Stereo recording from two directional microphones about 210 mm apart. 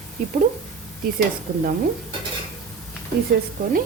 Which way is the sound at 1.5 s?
45° right (ahead or behind).